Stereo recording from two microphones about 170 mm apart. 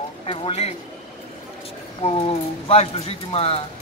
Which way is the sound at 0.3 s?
35° left (ahead or behind).